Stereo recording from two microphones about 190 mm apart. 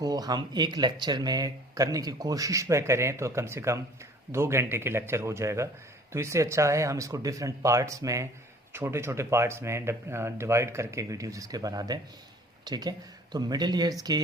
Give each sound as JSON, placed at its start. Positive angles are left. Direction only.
{"t": 0.0, "sound": "speech", "side_deg": -20}